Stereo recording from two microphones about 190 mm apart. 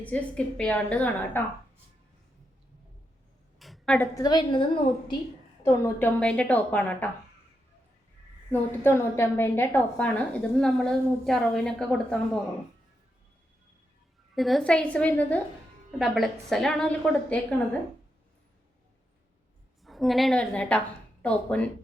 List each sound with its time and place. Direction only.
0.0 s a woman's voice: 5° left (ahead or behind)
3.6 s a sound: centre (ahead or behind)
3.9 s a woman's voice: 15° left (ahead or behind)
5.6 s a woman's voice: 10° left (ahead or behind)
8.8 s a woman's voice: 10° left (ahead or behind)
14.3 s a woman's voice: centre (ahead or behind)
19.8 s a woman's voice: centre (ahead or behind)